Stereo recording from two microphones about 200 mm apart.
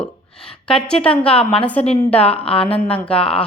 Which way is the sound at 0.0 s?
5° left (ahead or behind).